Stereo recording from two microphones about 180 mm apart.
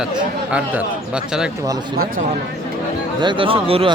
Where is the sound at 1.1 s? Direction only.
5° right (ahead or behind).